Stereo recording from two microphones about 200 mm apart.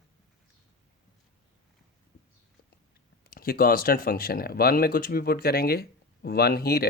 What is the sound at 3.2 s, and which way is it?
A man's voice, 45° left (ahead or behind).